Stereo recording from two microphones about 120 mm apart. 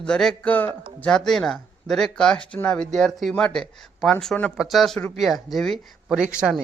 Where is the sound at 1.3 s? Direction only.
Centre (ahead or behind).